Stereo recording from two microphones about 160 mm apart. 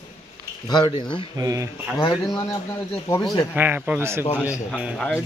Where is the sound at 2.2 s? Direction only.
20° left (ahead or behind).